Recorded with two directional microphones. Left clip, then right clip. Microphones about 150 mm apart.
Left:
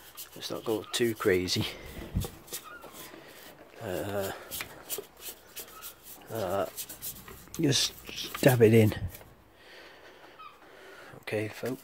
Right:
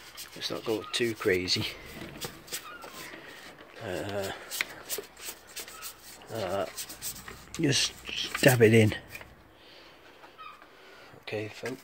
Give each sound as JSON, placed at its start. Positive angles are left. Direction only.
{"t": 0.4, "sound": "speech", "side_deg": 0}
{"t": 0.7, "sound": "speech", "side_deg": 30}
{"t": 2.1, "sound": "vehicle", "side_deg": 15}
{"t": 3.8, "sound": "speech", "side_deg": 15}
{"t": 4.3, "sound": "shuffling cards", "side_deg": 15}
{"t": 6.3, "sound": "speech", "side_deg": 10}
{"t": 7.5, "sound": "a sound", "side_deg": 10}
{"t": 8.4, "sound": "speech", "side_deg": 5}
{"t": 11.2, "sound": "speech", "side_deg": 50}